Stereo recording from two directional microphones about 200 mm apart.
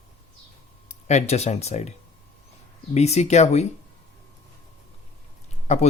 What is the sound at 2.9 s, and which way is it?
Speech, 35° left (ahead or behind).